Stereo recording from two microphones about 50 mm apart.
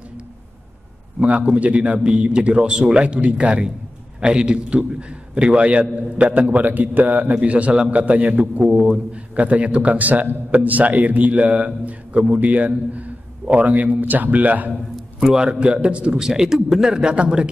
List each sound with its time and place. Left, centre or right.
1.2 s speech: right
8.6 s a man's voice: centre
9.3 s a man's voice: right
14.7 s a man's voice: centre
16.9 s a man's voice: centre